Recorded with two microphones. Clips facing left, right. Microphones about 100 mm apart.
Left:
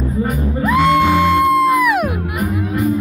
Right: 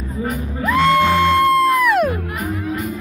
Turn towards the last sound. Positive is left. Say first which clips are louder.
# left 1 dB
turn(degrees=5)  # may be behind; listen again after turning